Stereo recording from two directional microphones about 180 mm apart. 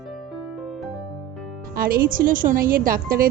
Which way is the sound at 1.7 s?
55° right (ahead or behind).